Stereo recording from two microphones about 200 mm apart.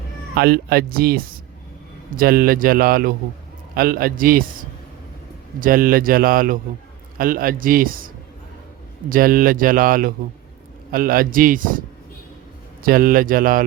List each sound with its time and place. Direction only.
0.3 s speech: 50° right (ahead or behind)
12.8 s speech: 45° right (ahead or behind)